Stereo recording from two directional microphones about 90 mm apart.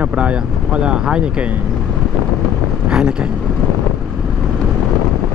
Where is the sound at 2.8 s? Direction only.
10° right (ahead or behind).